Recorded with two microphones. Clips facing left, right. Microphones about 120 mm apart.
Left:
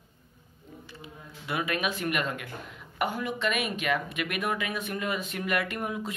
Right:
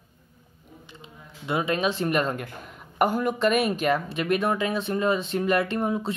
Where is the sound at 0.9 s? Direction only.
25° right (ahead or behind).